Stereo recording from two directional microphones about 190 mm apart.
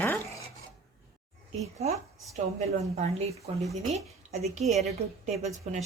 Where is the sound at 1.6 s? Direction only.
35° right (ahead or behind).